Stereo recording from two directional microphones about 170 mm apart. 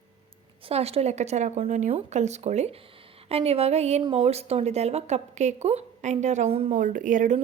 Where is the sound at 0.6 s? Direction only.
35° right (ahead or behind).